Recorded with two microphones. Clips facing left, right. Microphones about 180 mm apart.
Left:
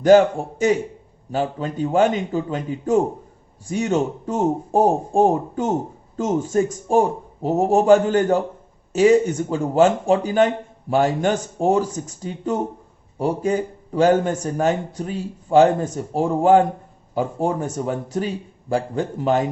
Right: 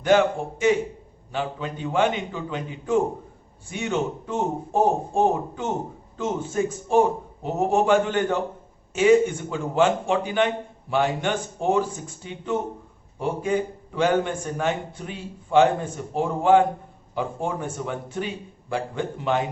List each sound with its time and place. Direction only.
0.0 s a man's voice: 40° left (ahead or behind)